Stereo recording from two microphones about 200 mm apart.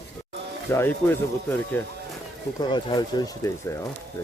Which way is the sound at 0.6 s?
10° left (ahead or behind).